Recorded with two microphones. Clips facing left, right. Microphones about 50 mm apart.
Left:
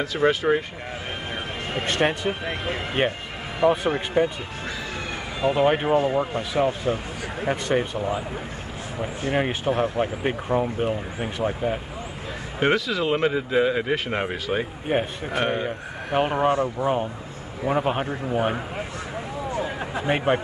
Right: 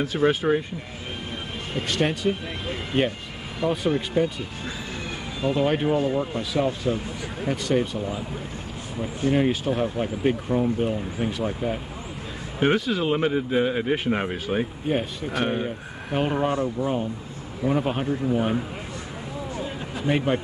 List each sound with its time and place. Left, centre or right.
0.3 s speech: left
1.7 s speech: left
5.4 s speech: left
12.5 s speech: left
14.3 s speech: left
14.9 s speech: left
15.4 s speech: left
16.1 s speech: left
19.6 s a sound: left